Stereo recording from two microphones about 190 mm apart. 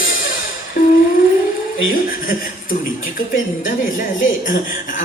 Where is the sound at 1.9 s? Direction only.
45° left (ahead or behind).